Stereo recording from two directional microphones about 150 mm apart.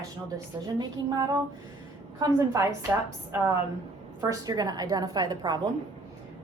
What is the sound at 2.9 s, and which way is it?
Speech, 15° right (ahead or behind).